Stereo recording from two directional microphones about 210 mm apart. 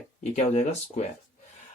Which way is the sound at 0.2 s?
35° left (ahead or behind).